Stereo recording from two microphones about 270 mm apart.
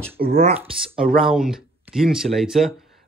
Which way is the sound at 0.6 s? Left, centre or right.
Centre.